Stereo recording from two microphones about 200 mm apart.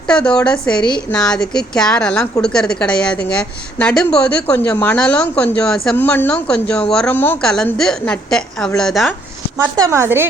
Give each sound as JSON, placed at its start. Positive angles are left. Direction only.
{"t": 0.1, "sound": "a woman's voice", "side_deg": 5}
{"t": 9.9, "sound": "a woman's voice", "side_deg": -15}